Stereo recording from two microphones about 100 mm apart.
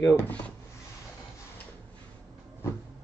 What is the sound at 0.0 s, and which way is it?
Speech, 25° left (ahead or behind).